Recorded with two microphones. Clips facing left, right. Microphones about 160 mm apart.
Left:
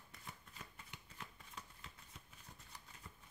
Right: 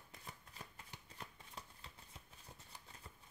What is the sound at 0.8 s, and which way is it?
Shuffling cards, 35° right (ahead or behind).